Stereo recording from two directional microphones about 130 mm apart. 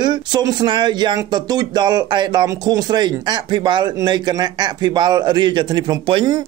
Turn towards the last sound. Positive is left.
turn(degrees=-35)  # may be behind; listen again after turning